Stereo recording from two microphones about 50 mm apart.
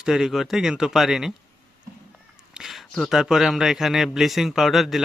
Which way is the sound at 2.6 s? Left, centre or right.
Centre.